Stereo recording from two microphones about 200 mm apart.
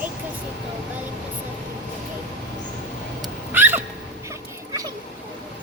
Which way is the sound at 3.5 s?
10° right (ahead or behind).